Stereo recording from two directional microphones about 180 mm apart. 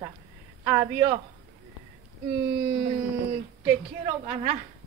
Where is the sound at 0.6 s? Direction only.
15° right (ahead or behind).